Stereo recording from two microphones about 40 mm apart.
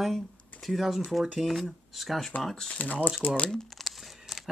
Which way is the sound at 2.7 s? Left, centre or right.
Left.